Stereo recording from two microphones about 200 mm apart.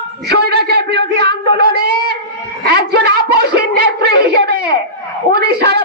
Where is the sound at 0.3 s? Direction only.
50° right (ahead or behind).